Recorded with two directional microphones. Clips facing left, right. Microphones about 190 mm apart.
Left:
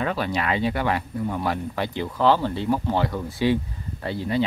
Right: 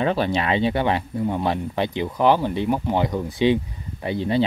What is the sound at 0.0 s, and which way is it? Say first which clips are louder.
Speech: right 4 dB; 25° right (ahead or behind).